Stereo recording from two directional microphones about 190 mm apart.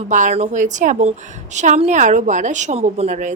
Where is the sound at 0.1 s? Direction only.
40° right (ahead or behind).